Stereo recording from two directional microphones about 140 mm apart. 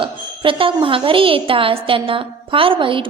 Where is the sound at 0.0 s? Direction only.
35° right (ahead or behind).